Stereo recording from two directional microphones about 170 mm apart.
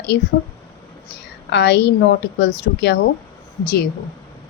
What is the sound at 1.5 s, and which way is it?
A woman's voice, 85° left.